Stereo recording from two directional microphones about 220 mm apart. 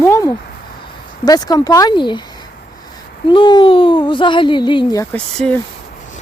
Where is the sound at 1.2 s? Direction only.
15° left (ahead or behind).